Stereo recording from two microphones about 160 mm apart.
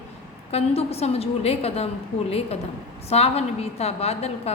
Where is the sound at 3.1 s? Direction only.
40° left (ahead or behind).